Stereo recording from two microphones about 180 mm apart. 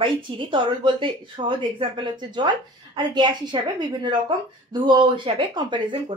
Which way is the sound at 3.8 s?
25° right (ahead or behind).